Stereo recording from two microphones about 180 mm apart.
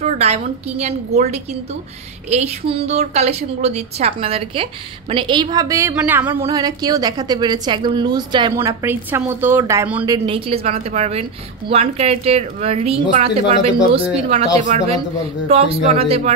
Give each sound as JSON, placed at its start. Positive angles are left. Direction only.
{"t": 0.0, "sound": "a woman's voice", "side_deg": -35}
{"t": 8.5, "sound": "a woman's voice", "side_deg": -15}
{"t": 10.0, "sound": "a woman's voice", "side_deg": -25}
{"t": 14.6, "sound": "a man's voice", "side_deg": -45}
{"t": 15.4, "sound": "a woman's voice", "side_deg": -35}